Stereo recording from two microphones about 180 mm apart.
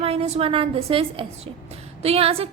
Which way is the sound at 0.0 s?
35° right (ahead or behind).